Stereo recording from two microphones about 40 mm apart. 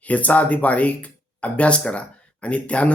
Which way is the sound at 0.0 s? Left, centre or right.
Left.